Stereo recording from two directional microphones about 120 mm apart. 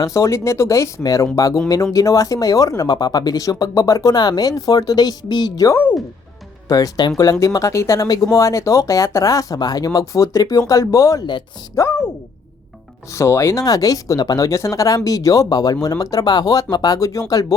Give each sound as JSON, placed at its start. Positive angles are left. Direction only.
{"t": 0.0, "sound": "speech", "side_deg": 25}
{"t": 13.1, "sound": "speech", "side_deg": 25}